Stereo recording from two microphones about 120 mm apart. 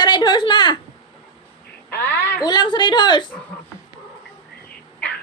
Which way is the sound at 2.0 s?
15° left (ahead or behind).